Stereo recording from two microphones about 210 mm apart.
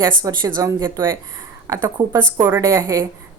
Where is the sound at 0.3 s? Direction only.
15° right (ahead or behind).